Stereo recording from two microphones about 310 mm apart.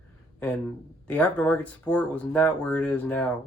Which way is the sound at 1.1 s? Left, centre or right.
Centre.